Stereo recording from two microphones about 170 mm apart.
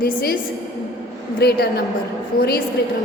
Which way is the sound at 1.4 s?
65° left (ahead or behind).